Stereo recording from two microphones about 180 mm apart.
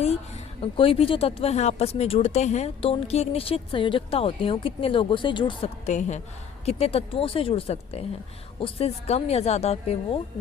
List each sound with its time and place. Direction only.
0.0 s a woman's voice: 35° left (ahead or behind)
5.8 s a woman's voice: 40° left (ahead or behind)